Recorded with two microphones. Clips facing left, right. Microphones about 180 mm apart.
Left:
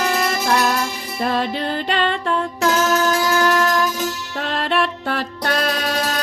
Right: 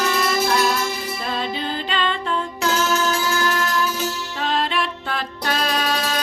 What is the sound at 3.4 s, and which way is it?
Music, 65° left (ahead or behind).